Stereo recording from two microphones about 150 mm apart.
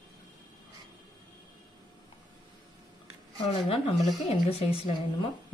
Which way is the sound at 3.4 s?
35° left (ahead or behind).